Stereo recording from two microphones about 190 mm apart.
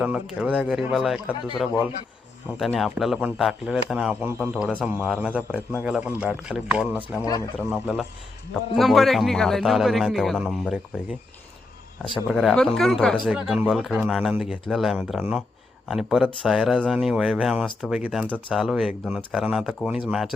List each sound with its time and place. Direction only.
0.0 s speech: 5° right (ahead or behind)
2.6 s speech: centre (ahead or behind)
4.4 s speech: 5° left (ahead or behind)
7.2 s speech: 20° left (ahead or behind)
7.7 s speech: centre (ahead or behind)